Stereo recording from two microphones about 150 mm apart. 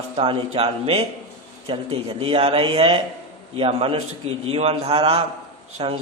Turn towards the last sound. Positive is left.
turn(degrees=-35)  # may be behind; listen again after turning